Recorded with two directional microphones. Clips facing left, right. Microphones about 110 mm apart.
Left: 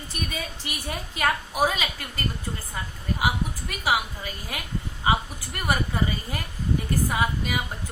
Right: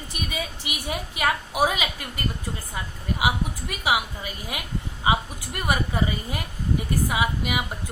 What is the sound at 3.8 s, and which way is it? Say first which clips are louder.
Speech: right 1 dB; 15° right (ahead or behind).